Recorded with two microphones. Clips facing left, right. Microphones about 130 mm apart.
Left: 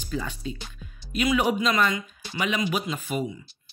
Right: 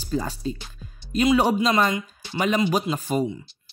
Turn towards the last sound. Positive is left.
turn(degrees=-35)  # may be behind; listen again after turning